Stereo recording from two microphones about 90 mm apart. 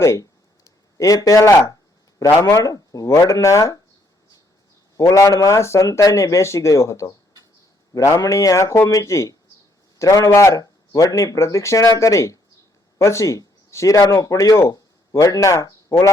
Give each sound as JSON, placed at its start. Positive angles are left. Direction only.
{"t": 0.0, "sound": "a sound", "side_deg": 35}
{"t": 2.1, "sound": "speech", "side_deg": 35}
{"t": 4.9, "sound": "speech", "side_deg": 40}